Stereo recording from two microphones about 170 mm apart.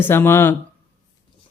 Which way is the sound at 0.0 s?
15° left (ahead or behind).